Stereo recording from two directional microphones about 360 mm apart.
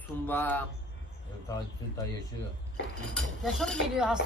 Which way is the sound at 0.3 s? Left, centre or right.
Centre.